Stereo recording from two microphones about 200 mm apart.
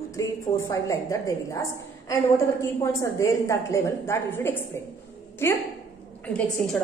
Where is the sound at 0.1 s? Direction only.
15° left (ahead or behind).